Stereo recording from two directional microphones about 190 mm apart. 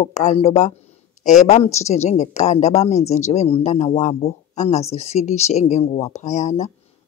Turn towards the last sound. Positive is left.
turn(degrees=40)  # may be behind; listen again after turning